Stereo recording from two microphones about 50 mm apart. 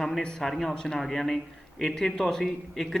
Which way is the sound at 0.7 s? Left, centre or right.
Centre.